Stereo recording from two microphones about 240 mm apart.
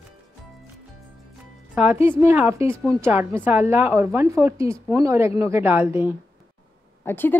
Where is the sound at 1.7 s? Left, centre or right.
Centre.